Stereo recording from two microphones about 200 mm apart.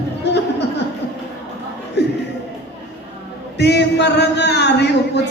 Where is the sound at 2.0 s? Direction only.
55° left (ahead or behind).